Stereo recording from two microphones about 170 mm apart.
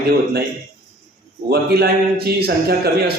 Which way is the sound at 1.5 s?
65° right (ahead or behind).